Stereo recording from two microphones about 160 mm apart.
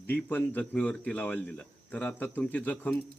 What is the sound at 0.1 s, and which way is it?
A man's voice, 10° left (ahead or behind).